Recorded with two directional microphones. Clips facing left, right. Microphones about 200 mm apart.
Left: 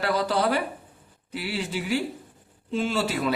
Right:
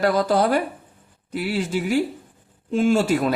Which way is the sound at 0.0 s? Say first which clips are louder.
Right 5 dB; 45° right (ahead or behind).